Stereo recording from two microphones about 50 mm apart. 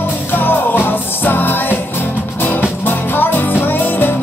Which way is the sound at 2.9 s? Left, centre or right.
Left.